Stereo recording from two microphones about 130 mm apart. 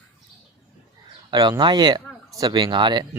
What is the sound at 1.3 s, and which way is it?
Speech, 35° right (ahead or behind).